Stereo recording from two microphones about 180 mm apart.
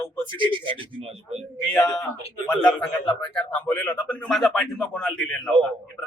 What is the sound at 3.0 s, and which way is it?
Speech, 25° left (ahead or behind).